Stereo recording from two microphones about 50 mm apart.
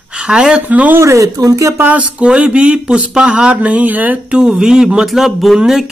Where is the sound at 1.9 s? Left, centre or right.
Right.